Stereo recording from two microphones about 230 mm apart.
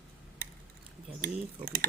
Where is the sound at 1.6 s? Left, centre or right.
Right.